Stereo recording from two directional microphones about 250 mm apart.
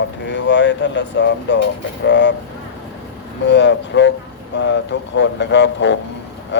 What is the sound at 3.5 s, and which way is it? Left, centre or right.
Speech, left.